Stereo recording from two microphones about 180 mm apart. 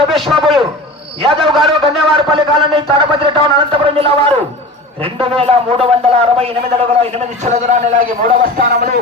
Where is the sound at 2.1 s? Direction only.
30° right (ahead or behind).